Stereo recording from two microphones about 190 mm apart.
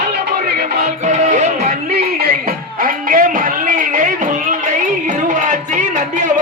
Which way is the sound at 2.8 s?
45° right (ahead or behind).